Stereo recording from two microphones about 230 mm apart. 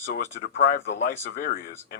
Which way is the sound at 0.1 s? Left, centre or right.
Left.